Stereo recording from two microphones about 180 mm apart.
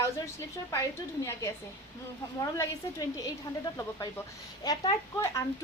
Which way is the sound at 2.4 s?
20° left (ahead or behind).